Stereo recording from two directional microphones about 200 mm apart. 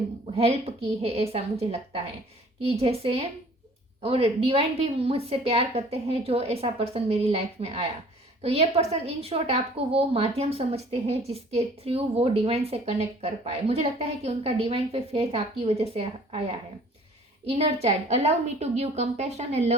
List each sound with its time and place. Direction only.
0.3 s a woman's voice: 30° right (ahead or behind)
17.6 s a woman's voice: 30° right (ahead or behind)